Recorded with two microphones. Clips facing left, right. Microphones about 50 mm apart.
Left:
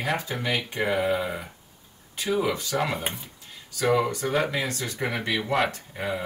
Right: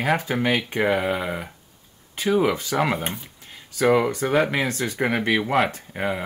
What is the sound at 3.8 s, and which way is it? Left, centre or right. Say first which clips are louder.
A man's voice: right 4 dB; right.